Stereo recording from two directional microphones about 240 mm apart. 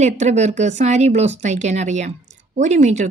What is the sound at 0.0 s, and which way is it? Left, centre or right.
Speech, right.